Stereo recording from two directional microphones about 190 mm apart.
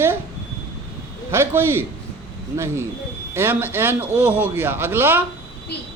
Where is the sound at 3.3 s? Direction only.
10° right (ahead or behind).